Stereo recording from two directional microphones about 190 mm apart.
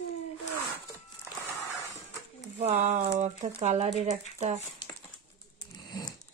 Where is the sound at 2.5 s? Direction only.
35° right (ahead or behind).